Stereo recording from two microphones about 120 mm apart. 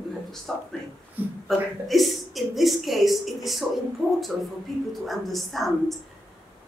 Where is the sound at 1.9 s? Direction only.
Centre (ahead or behind).